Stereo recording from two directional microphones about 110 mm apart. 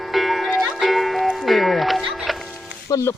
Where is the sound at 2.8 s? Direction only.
30° left (ahead or behind).